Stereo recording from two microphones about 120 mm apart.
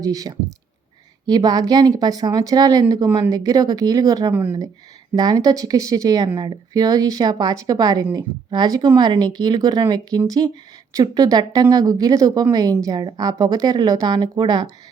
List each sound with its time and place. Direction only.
0.0 s speech: 30° right (ahead or behind)
4.3 s speech: 15° right (ahead or behind)
5.1 s speech: 35° right (ahead or behind)